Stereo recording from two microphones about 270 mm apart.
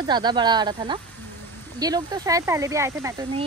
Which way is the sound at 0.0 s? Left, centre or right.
Centre.